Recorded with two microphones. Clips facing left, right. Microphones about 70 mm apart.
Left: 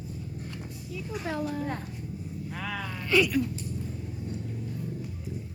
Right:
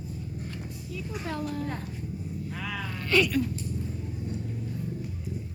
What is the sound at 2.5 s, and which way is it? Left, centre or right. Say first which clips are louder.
Speech: left 2 dB; left.